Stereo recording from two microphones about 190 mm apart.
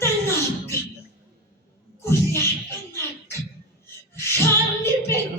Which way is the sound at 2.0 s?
15° left (ahead or behind).